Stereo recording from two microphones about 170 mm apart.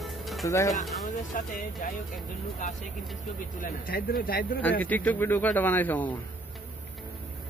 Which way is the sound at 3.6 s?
60° left (ahead or behind).